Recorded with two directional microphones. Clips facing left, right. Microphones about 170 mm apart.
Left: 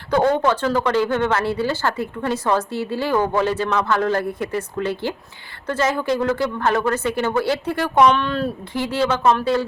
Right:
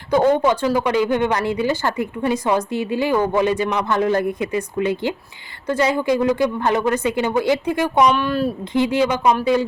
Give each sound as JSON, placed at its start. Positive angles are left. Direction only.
{"t": 0.1, "sound": "speech", "side_deg": -15}